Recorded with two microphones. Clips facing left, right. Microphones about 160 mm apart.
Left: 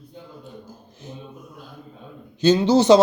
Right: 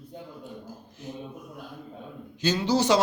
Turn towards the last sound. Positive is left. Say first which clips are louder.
# left 8 dB
turn(degrees=25)  # may be behind; listen again after turning